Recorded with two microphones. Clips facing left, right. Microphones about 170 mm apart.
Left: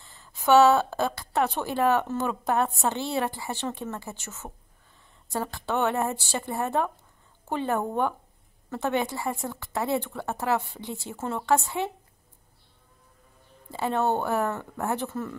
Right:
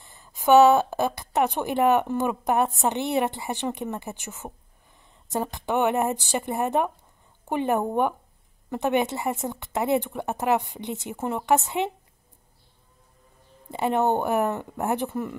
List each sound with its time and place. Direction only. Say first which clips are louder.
0.0 s a woman's voice: right 3 dB; 15° right (ahead or behind)
13.7 s a woman's voice: right 3 dB; 20° right (ahead or behind)